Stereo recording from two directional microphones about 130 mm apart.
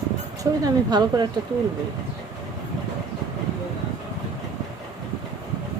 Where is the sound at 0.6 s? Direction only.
30° right (ahead or behind).